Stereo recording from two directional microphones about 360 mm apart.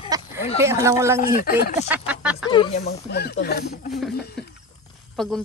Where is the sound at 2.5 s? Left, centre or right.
Centre.